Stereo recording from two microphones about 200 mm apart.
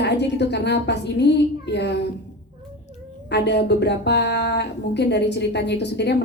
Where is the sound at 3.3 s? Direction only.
55° left (ahead or behind).